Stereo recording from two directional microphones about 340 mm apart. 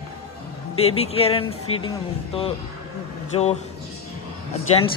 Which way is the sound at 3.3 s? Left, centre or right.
Centre.